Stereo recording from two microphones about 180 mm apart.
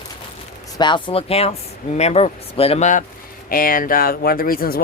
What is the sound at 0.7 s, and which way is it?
Speech, 25° left (ahead or behind).